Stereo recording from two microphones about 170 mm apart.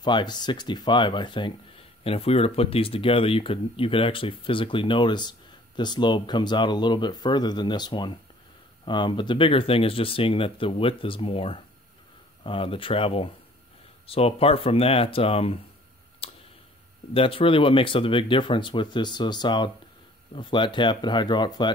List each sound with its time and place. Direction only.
0.0 s speech: 25° left (ahead or behind)
16.2 s tick-tock: 35° left (ahead or behind)
17.1 s speech: 30° left (ahead or behind)